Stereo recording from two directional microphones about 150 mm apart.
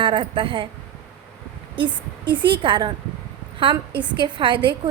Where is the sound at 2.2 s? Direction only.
30° right (ahead or behind).